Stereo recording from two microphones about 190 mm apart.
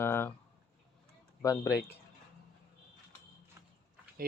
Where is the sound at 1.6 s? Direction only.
15° left (ahead or behind).